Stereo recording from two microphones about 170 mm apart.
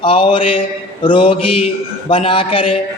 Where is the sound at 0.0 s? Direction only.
30° left (ahead or behind).